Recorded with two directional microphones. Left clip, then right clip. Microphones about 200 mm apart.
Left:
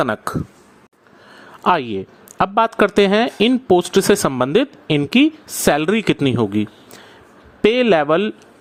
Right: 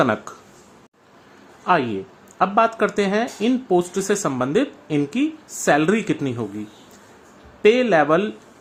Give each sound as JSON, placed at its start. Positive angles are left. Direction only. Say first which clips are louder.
{"t": 0.0, "sound": "speech", "louder": "even", "side_deg": 45}
{"t": 1.6, "sound": "speech", "louder": "left 2 dB", "side_deg": 45}
{"t": 7.6, "sound": "speech", "louder": "left 1 dB", "side_deg": 45}